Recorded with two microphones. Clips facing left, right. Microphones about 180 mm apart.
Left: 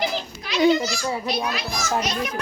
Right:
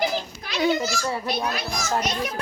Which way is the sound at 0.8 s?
15° left (ahead or behind).